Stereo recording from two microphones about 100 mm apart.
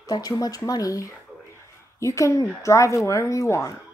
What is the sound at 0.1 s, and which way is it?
A woman's voice, 40° left (ahead or behind).